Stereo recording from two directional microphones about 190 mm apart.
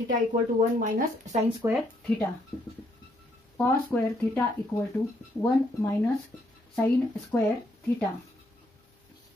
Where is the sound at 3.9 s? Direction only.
5° left (ahead or behind).